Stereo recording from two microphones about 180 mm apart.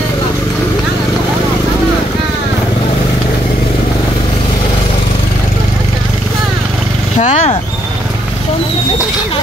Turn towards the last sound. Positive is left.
turn(degrees=40)  # may be behind; listen again after turning